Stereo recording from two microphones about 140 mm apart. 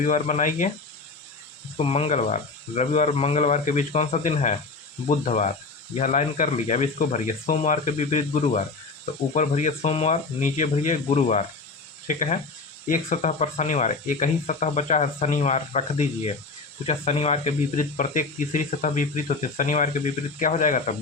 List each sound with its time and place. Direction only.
0.0 s speech: 60° left (ahead or behind)
1.8 s speech: 45° left (ahead or behind)
12.0 s speech: 65° left (ahead or behind)
12.9 s speech: 55° left (ahead or behind)
17.7 s speech: 70° left (ahead or behind)